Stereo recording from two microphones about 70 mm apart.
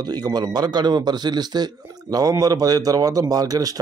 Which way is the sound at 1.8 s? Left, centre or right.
Right.